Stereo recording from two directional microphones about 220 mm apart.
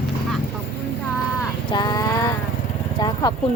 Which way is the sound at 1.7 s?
20° left (ahead or behind).